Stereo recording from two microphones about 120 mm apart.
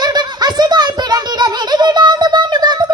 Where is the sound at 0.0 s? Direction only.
35° right (ahead or behind).